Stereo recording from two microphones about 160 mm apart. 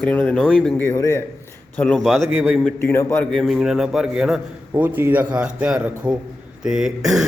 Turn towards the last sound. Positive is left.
turn(degrees=-5)  # may be behind; listen again after turning